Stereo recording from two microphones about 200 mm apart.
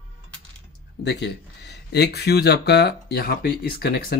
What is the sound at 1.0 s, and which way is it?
Speech, 55° left (ahead or behind).